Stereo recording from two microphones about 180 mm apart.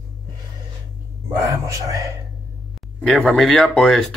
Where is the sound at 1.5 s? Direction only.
15° right (ahead or behind).